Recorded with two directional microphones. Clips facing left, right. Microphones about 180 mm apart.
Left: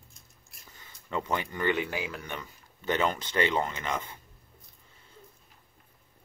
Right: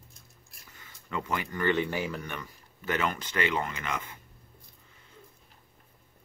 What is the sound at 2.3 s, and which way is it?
Speech, 25° left (ahead or behind).